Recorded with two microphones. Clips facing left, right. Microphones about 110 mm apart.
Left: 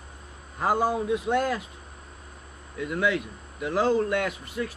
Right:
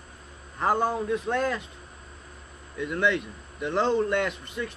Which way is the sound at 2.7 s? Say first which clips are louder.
Even; 5° left (ahead or behind).